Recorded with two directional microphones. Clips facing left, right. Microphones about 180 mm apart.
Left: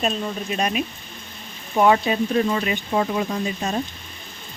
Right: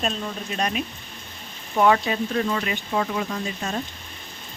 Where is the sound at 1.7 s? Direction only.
20° left (ahead or behind).